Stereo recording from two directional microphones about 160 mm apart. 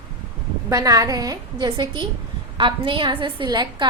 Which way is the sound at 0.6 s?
20° right (ahead or behind).